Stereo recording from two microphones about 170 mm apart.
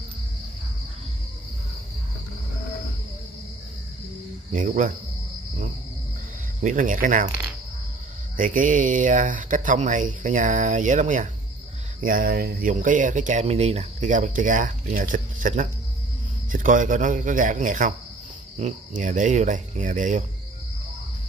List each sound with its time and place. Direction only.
4.5 s speech: 50° right (ahead or behind)
6.6 s speech: 50° right (ahead or behind)
8.4 s speech: 50° right (ahead or behind)